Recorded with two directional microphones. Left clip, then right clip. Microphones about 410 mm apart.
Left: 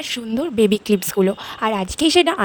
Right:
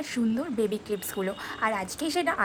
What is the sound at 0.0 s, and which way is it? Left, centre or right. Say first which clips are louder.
A woman's voice: left 7 dB; centre.